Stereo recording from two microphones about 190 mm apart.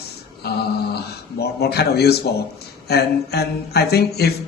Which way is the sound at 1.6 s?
55° left (ahead or behind).